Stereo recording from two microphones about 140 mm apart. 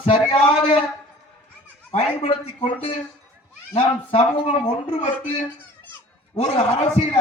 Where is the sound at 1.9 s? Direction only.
45° left (ahead or behind).